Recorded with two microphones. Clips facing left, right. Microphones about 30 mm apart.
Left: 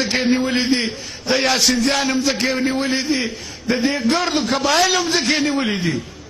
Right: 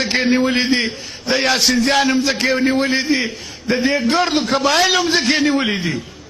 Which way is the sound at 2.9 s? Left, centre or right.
Centre.